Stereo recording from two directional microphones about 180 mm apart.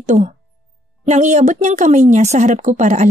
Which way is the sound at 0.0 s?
40° right (ahead or behind).